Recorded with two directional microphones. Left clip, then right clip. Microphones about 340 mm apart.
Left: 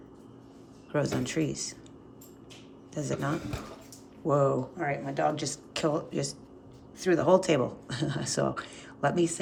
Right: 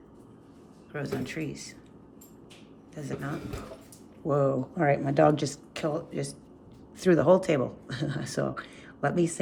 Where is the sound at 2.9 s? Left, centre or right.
Centre.